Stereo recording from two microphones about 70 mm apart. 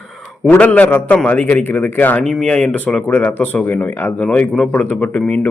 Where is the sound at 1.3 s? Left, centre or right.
Left.